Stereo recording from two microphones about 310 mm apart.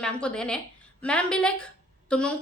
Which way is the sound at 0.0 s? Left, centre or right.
Centre.